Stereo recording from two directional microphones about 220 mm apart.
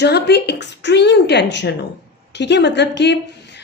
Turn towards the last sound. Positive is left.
turn(degrees=50)  # may be behind; listen again after turning